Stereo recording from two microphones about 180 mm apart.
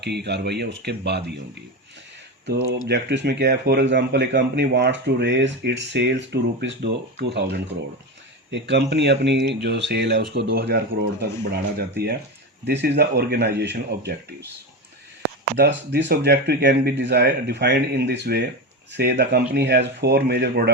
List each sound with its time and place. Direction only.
0.0 s speech: 70° right (ahead or behind)
2.5 s speech: 65° right (ahead or behind)
8.4 s speech: 80° right
15.5 s speech: 65° right (ahead or behind)